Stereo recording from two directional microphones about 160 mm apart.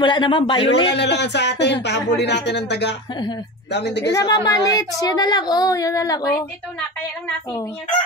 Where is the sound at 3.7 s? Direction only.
90° left.